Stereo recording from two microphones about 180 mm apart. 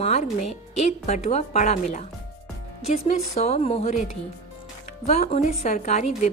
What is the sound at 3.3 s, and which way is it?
Speech, 35° left (ahead or behind).